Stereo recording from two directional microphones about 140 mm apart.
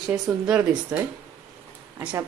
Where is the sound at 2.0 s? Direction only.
10° right (ahead or behind).